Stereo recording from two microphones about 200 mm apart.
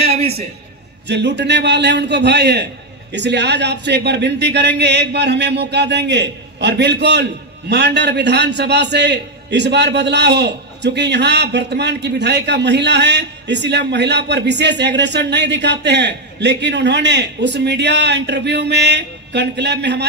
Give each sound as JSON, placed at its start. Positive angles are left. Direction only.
{"t": 1.0, "sound": "a man's voice", "side_deg": -60}